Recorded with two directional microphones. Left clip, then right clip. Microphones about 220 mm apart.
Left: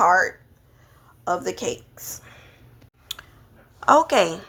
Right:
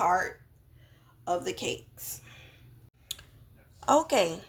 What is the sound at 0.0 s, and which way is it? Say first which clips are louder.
A woman's voice: left 9 dB; 20° left (ahead or behind).